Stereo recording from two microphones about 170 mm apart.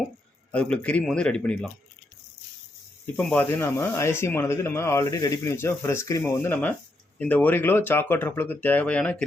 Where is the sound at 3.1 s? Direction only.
10° left (ahead or behind).